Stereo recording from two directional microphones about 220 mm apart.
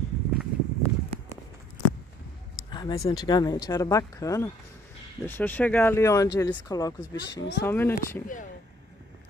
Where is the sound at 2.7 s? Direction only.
20° left (ahead or behind).